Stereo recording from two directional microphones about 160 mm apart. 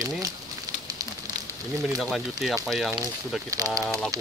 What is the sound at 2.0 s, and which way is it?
Speech, centre (ahead or behind).